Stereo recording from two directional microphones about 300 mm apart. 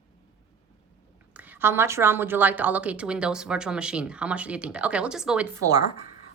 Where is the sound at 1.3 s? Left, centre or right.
Centre.